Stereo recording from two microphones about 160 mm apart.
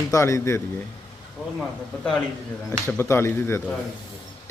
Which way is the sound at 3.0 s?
15° left (ahead or behind).